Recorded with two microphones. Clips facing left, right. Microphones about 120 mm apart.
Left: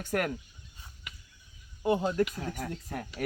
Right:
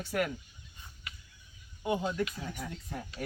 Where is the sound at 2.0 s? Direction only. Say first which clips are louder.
Left 5 dB; 45° left (ahead or behind).